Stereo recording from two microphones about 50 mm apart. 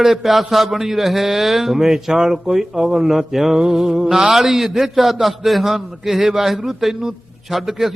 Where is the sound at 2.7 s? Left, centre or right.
Centre.